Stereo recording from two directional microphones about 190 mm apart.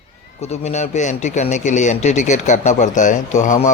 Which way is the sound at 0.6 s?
35° left (ahead or behind).